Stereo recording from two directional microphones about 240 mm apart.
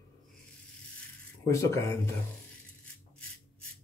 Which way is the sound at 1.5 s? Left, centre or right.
Centre.